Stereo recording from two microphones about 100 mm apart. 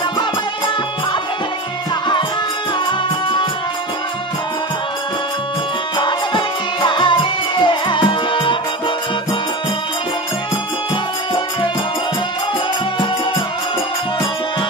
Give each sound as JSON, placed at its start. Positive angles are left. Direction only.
{"t": 5.9, "sound": "music", "side_deg": 50}